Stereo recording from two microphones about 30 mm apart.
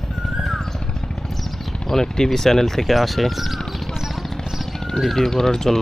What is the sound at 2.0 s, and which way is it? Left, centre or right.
Speech, left.